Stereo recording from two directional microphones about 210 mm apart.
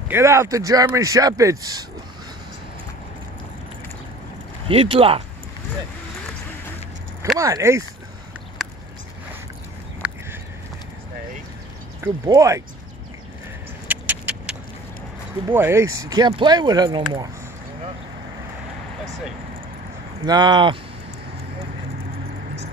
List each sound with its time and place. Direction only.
0.1 s speech: 15° right (ahead or behind)
4.6 s speech: 25° right (ahead or behind)
7.3 s speech: 15° right (ahead or behind)
12.0 s speech: 15° right (ahead or behind)
13.8 s vehicle: 5° right (ahead or behind)
15.4 s speech: 10° right (ahead or behind)
20.2 s speech: 20° right (ahead or behind)